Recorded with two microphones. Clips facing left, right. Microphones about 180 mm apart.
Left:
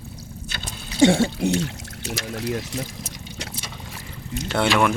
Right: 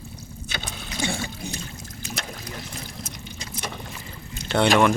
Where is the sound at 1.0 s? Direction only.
75° left (ahead or behind).